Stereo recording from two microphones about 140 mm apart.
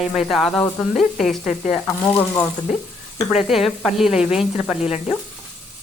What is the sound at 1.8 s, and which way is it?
Speech, 15° left (ahead or behind).